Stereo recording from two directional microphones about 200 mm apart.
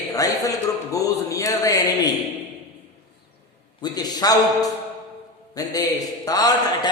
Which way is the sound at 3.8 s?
20° left (ahead or behind).